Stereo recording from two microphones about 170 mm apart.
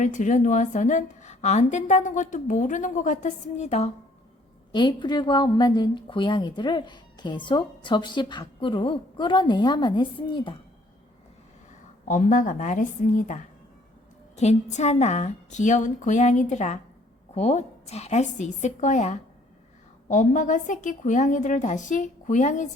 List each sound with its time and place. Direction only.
0.0 s a woman's voice: 45° left (ahead or behind)
4.7 s a woman's voice: 25° left (ahead or behind)
12.0 s a woman's voice: 50° left (ahead or behind)